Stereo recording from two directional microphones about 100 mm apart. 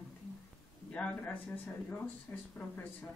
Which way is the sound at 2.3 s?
25° left (ahead or behind).